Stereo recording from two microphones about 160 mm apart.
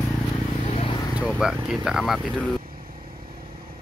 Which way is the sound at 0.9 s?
25° left (ahead or behind).